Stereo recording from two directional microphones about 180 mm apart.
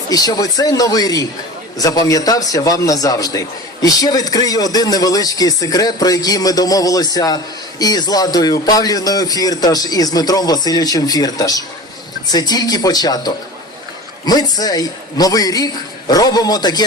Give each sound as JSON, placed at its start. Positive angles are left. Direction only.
{"t": 0.1, "sound": "speech", "side_deg": 20}